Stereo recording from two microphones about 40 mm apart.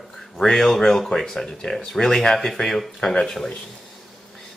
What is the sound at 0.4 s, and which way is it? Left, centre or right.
Speech, centre.